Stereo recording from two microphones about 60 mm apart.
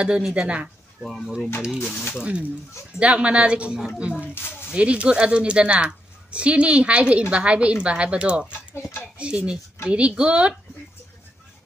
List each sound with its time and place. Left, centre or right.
0.0 s speech: centre
1.0 s speech: centre
2.1 s a woman's voice: centre
4.2 s speech: left
4.7 s a woman's voice: centre